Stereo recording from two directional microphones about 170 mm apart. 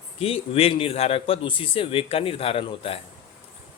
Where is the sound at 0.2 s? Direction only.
35° left (ahead or behind).